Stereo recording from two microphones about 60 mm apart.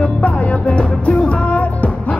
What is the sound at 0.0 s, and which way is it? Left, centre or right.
Music, left.